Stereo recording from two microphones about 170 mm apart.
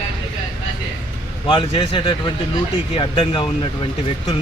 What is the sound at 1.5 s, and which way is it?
Speech, 30° left (ahead or behind).